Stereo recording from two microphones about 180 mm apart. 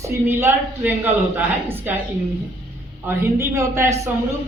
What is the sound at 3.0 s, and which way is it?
Speech, 15° right (ahead or behind).